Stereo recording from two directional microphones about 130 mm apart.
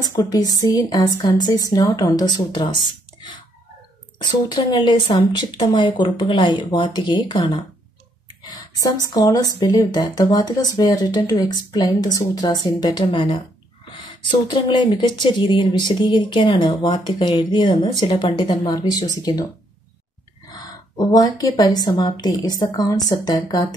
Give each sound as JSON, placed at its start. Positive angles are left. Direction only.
{"t": 0.0, "sound": "a woman's voice", "side_deg": 30}
{"t": 21.0, "sound": "speech", "side_deg": 30}